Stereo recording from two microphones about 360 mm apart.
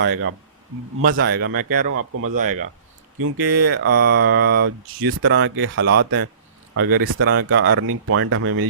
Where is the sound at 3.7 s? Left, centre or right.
Right.